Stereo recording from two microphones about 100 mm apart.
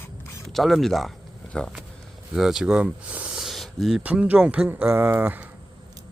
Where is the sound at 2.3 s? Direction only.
5° right (ahead or behind).